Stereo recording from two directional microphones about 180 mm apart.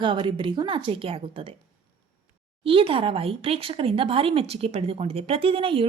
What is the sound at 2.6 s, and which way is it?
Speech, 30° right (ahead or behind).